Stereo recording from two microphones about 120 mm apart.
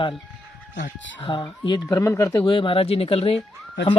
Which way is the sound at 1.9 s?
25° left (ahead or behind).